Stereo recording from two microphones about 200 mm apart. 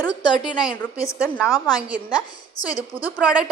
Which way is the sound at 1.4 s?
20° left (ahead or behind).